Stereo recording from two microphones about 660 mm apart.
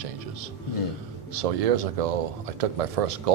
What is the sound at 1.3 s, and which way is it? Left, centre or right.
Speech, right.